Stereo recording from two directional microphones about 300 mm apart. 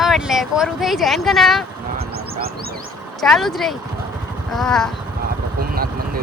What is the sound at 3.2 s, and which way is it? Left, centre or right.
Speech, centre.